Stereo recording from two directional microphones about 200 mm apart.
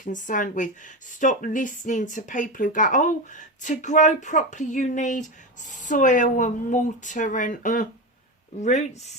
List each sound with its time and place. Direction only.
0.0 s speech: 40° left (ahead or behind)